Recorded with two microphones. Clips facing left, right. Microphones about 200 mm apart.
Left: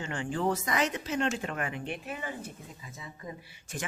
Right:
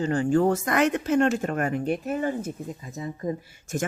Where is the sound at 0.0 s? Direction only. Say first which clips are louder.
Right 10 dB; 40° right (ahead or behind).